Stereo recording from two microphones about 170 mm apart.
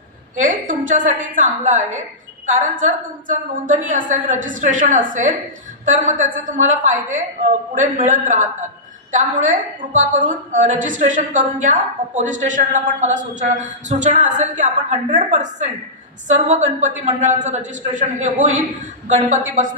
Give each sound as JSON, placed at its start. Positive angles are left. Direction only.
{"t": 0.4, "sound": "a woman's voice", "side_deg": -50}